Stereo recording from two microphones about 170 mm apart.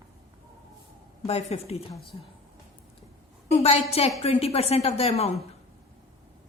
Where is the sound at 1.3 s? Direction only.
40° left (ahead or behind).